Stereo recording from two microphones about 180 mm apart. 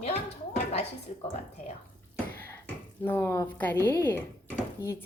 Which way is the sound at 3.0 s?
15° left (ahead or behind).